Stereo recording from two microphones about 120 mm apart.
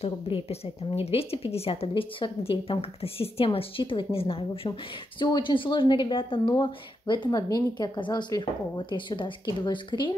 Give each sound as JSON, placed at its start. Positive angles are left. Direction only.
{"t": 0.0, "sound": "a woman's voice", "side_deg": 55}